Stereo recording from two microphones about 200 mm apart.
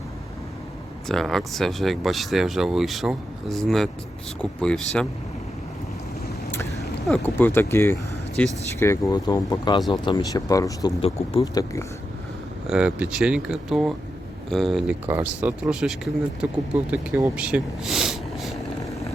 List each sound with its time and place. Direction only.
1.0 s speech: centre (ahead or behind)
6.5 s a sound: 15° left (ahead or behind)
7.0 s speech: 5° left (ahead or behind)
11.0 s speech: 30° left (ahead or behind)
12.6 s speech: 5° right (ahead or behind)
17.2 s a sound: 10° right (ahead or behind)